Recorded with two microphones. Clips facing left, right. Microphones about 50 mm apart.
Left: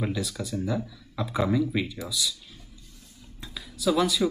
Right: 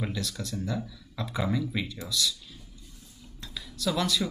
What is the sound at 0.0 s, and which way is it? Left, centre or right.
Speech, centre.